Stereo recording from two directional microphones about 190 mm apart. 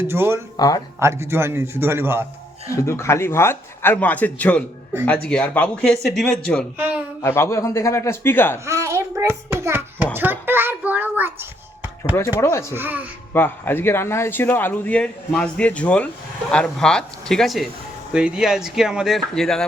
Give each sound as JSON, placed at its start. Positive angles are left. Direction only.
{"t": 0.0, "sound": "a man's voice", "side_deg": -10}
{"t": 0.5, "sound": "speech", "side_deg": 20}
{"t": 0.9, "sound": "a man's voice", "side_deg": -15}
{"t": 2.8, "sound": "a man's voice", "side_deg": 15}
{"t": 6.7, "sound": "a man's voice", "side_deg": -10}
{"t": 7.2, "sound": "a man's voice", "side_deg": 15}
{"t": 8.5, "sound": "a sound", "side_deg": -15}
{"t": 10.2, "sound": "a child's voice", "side_deg": -10}
{"t": 12.4, "sound": "a man's voice", "side_deg": 15}
{"t": 12.7, "sound": "a man's voice", "side_deg": -10}
{"t": 13.3, "sound": "a man's voice", "side_deg": 10}